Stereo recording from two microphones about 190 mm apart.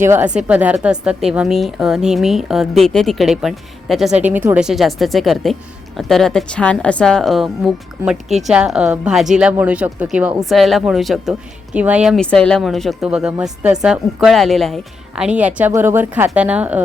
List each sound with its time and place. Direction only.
0.0 s speech: 10° right (ahead or behind)